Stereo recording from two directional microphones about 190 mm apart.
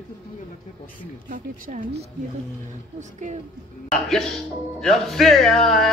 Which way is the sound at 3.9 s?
5° left (ahead or behind).